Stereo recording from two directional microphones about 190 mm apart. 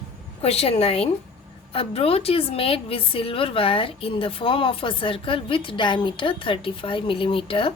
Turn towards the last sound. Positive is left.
turn(degrees=30)  # may be behind; listen again after turning